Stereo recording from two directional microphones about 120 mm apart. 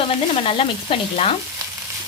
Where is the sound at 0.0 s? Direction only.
50° left (ahead or behind).